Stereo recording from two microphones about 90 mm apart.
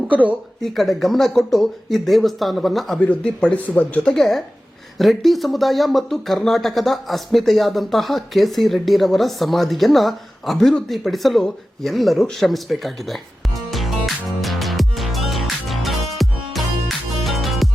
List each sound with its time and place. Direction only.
0.1 s speech: 15° right (ahead or behind)
0.6 s speech: centre (ahead or behind)
3.0 s speech: 15° left (ahead or behind)
4.1 s speech: 5° left (ahead or behind)
17.2 s music: centre (ahead or behind)